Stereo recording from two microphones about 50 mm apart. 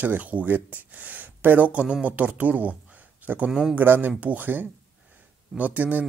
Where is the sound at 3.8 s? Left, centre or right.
Right.